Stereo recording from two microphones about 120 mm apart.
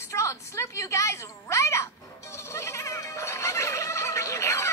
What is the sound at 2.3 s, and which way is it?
Music, 25° left (ahead or behind).